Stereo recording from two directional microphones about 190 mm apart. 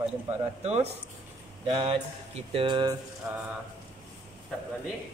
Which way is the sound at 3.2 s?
10° right (ahead or behind).